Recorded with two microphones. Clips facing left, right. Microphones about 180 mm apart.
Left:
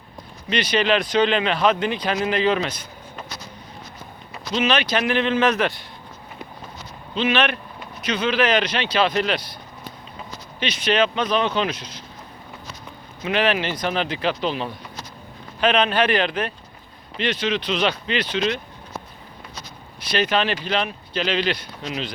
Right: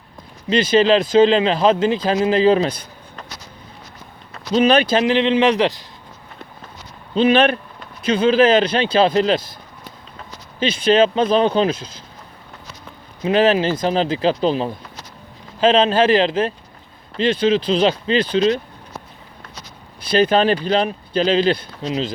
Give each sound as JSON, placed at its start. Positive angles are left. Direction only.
{"t": 0.5, "sound": "speech", "side_deg": -25}
{"t": 4.5, "sound": "speech", "side_deg": -35}
{"t": 7.1, "sound": "speech", "side_deg": -35}
{"t": 10.8, "sound": "speech", "side_deg": -30}
{"t": 13.2, "sound": "speech", "side_deg": -30}
{"t": 20.1, "sound": "speech", "side_deg": -30}